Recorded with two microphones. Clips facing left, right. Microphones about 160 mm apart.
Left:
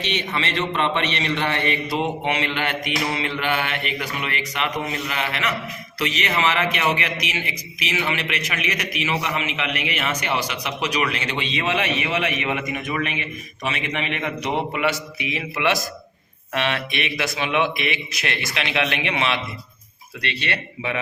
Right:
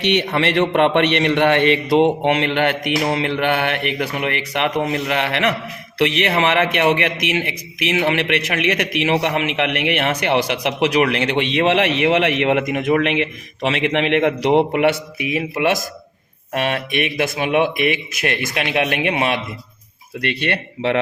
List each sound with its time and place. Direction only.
0.0 s a man's voice: 65° right (ahead or behind)